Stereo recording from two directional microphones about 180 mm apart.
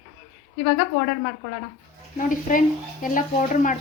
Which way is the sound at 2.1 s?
50° left (ahead or behind).